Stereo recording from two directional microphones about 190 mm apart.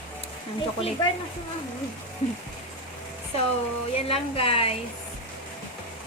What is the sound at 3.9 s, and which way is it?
Speech, 30° left (ahead or behind).